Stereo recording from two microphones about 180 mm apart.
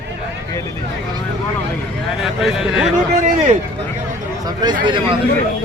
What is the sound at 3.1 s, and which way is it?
Speech, 40° right (ahead or behind).